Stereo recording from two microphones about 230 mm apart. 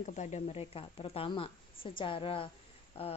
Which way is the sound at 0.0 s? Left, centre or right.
Left.